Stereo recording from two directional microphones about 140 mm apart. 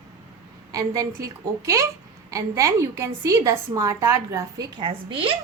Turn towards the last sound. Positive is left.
turn(degrees=-40)  # may be behind; listen again after turning